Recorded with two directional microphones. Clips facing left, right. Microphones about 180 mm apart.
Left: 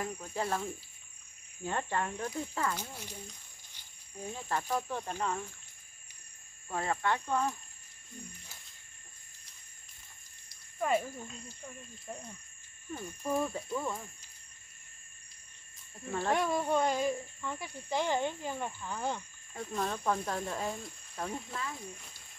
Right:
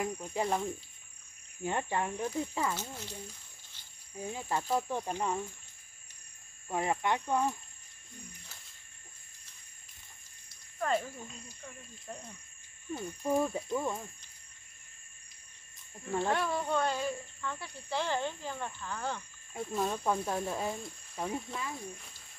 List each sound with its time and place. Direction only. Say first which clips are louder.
0.0 s cricket: right 2 dB; 15° right (ahead or behind)
2.7 s speech: right 1 dB; 10° left (ahead or behind)
4.2 s cricket: right 1 dB; 10° right (ahead or behind)
6.7 s cricket: right 1 dB; 15° right (ahead or behind)
10.8 s speech: left 1 dB; 10° left (ahead or behind)
12.9 s cricket: right 3 dB; 20° right (ahead or behind)
16.3 s speech: left 4 dB; 15° left (ahead or behind)
19.5 s speech: right 2 dB; 5° right (ahead or behind)